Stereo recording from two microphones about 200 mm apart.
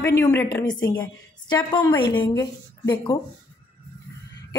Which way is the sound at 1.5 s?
20° left (ahead or behind).